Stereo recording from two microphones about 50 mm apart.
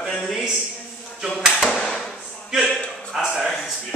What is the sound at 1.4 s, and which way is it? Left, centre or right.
Speech, centre.